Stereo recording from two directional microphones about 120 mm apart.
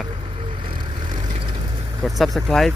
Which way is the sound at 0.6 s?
40° right (ahead or behind).